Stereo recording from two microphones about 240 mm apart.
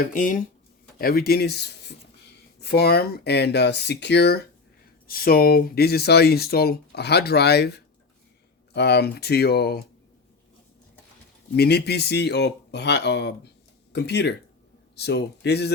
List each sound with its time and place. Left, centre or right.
0.1 s speech: left
11.5 s speech: left